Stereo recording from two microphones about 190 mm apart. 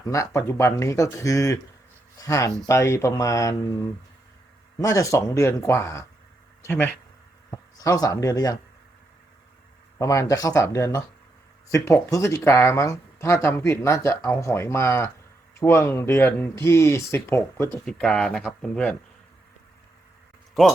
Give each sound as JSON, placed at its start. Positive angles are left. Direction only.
{"t": 0.0, "sound": "speech", "side_deg": 15}
{"t": 10.0, "sound": "speech", "side_deg": 20}